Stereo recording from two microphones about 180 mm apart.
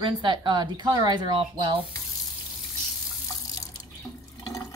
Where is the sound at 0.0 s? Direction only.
25° right (ahead or behind).